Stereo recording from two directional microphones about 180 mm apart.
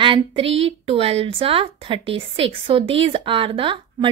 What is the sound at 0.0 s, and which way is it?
A woman's voice, 30° right (ahead or behind).